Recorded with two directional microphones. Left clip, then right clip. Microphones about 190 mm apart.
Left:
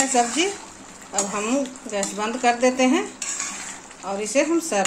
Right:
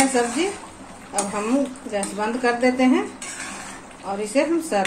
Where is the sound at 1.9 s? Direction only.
35° left (ahead or behind).